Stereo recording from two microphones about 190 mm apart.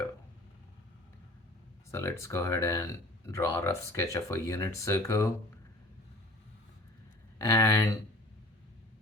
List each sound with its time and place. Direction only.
1.9 s speech: 15° left (ahead or behind)
7.3 s speech: 15° left (ahead or behind)